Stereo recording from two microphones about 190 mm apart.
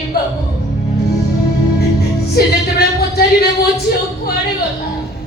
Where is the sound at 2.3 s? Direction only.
55° left (ahead or behind).